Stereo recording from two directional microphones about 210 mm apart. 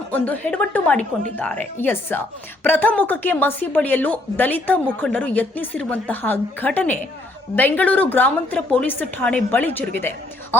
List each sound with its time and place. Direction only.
0.1 s speech: 5° left (ahead or behind)